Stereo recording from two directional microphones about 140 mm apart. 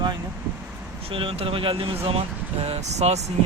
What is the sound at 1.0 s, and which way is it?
Speech, 40° right (ahead or behind).